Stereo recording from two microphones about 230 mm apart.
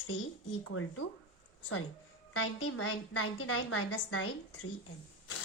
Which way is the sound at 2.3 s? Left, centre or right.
Left.